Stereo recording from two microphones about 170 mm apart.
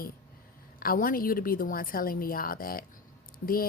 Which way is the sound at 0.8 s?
60° left (ahead or behind).